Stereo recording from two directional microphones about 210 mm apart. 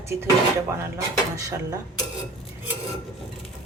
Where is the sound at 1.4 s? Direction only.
15° right (ahead or behind).